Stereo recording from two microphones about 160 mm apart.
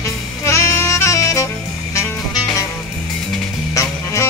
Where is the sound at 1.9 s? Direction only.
20° left (ahead or behind).